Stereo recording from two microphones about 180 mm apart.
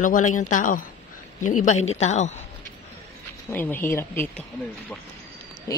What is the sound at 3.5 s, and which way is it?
Speech, 10° left (ahead or behind).